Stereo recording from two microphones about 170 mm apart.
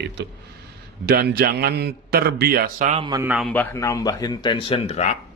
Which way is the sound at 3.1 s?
10° right (ahead or behind).